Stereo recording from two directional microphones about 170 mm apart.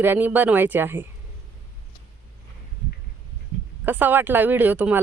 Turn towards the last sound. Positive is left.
turn(degrees=-10)  # may be behind; listen again after turning